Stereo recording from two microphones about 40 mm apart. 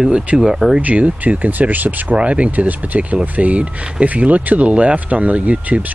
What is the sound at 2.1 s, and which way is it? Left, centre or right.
Speech, right.